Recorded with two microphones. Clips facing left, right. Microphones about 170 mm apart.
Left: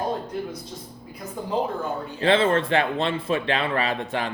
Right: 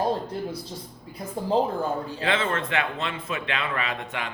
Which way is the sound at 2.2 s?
30° left (ahead or behind).